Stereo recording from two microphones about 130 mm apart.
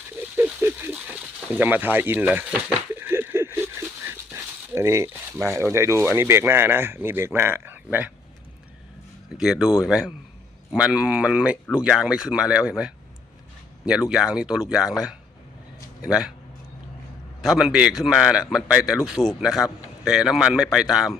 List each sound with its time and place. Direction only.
0.3 s a sound: 15° right (ahead or behind)
1.5 s speech: 15° right (ahead or behind)
2.9 s a sound: 15° right (ahead or behind)
5.5 s speech: 20° right (ahead or behind)
9.4 s a man's voice: 5° right (ahead or behind)
17.4 s a man's voice: 5° right (ahead or behind)